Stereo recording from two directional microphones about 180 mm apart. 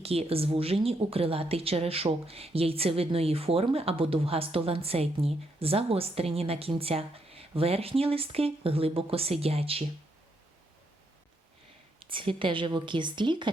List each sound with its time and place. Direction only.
0.0 s speech: 35° right (ahead or behind)
11.9 s a woman's voice: 30° right (ahead or behind)